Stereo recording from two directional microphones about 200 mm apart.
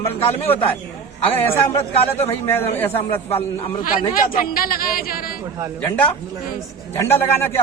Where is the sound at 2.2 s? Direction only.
10° left (ahead or behind).